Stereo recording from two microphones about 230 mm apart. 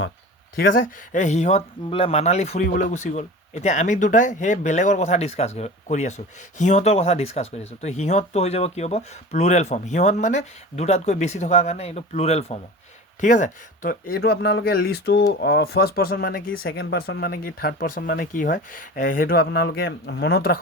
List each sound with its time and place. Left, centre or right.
0.5 s speech: left
16.5 s speech: left